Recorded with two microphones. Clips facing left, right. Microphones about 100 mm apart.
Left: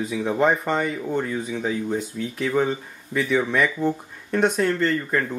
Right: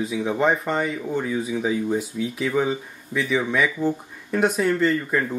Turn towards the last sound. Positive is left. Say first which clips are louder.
# right 1 dB
turn(degrees=-5)  # may be behind; listen again after turning